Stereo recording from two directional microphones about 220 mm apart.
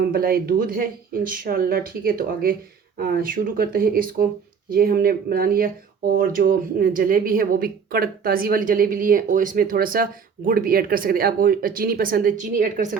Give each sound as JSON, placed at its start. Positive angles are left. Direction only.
{"t": 0.1, "sound": "speech", "side_deg": -40}